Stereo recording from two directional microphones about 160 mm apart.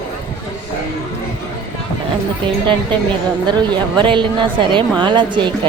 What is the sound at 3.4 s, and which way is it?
A woman's voice, 25° right (ahead or behind).